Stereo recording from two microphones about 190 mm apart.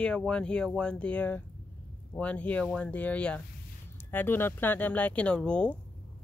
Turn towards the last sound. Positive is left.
turn(degrees=5)  # may be behind; listen again after turning